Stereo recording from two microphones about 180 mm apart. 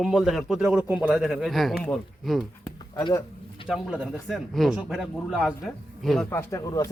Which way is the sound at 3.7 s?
5° right (ahead or behind).